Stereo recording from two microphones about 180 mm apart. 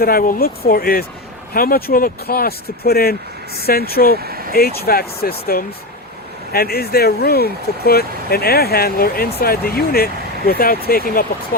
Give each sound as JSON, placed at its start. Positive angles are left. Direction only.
{"t": 0.0, "sound": "speech", "side_deg": 55}
{"t": 4.2, "sound": "vehicle", "side_deg": -55}
{"t": 4.5, "sound": "speech", "side_deg": 60}